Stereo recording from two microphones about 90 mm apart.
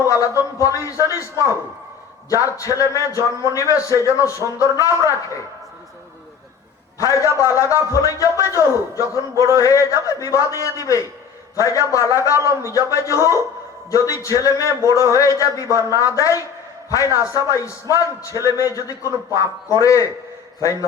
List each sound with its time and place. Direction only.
0.0 s a man's voice: 40° left (ahead or behind)
7.0 s a man's voice: 35° left (ahead or behind)